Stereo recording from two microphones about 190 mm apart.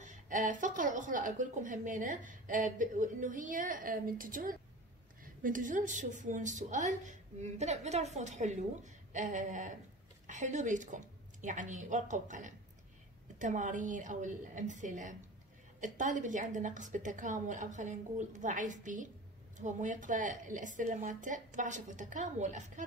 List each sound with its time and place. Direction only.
0.0 s a woman's voice: 40° right (ahead or behind)